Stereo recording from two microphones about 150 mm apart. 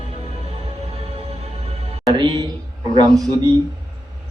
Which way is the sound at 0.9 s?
40° right (ahead or behind).